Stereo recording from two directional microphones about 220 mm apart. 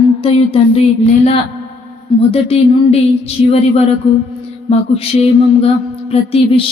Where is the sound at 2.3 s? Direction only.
25° left (ahead or behind).